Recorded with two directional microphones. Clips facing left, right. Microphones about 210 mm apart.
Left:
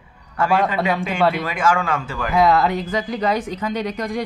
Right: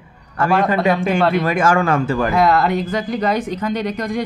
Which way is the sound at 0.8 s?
10° left (ahead or behind).